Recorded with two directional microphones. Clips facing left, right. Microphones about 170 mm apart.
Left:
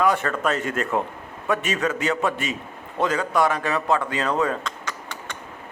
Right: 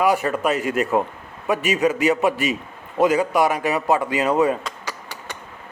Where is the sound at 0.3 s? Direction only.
15° right (ahead or behind).